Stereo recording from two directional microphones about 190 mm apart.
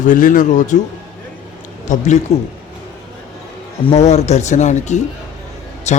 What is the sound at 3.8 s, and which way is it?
Speech, 35° left (ahead or behind).